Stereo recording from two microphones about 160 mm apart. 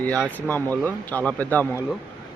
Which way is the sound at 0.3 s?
10° left (ahead or behind).